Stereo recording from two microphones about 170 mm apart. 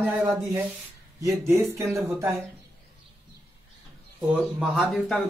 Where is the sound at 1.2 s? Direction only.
20° right (ahead or behind).